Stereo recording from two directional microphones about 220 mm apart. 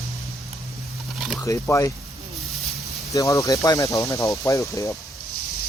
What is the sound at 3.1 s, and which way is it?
Speech, 15° left (ahead or behind).